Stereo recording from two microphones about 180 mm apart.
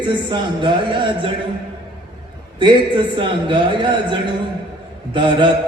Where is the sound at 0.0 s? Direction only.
25° right (ahead or behind).